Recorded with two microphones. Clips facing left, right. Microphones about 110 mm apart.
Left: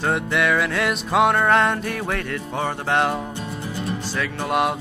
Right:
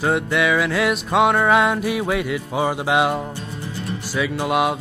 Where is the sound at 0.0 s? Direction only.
Centre (ahead or behind).